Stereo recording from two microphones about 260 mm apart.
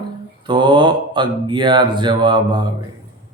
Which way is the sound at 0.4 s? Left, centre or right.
Centre.